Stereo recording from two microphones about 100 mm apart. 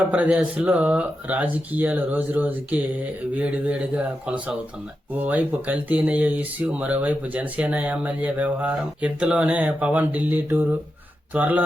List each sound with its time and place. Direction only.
0.1 s speech: 15° right (ahead or behind)